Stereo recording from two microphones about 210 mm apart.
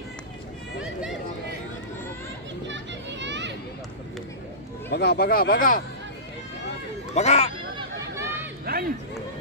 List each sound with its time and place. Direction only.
2.6 s children playing: 60° right (ahead or behind)
4.8 s speech: 50° left (ahead or behind)
7.2 s speech: 30° left (ahead or behind)
7.7 s a sound: 15° right (ahead or behind)
8.7 s run: 45° right (ahead or behind)